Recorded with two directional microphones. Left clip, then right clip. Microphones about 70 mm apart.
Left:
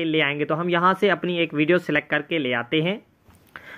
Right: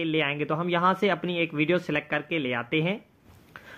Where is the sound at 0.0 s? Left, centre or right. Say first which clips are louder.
Left 5 dB; left.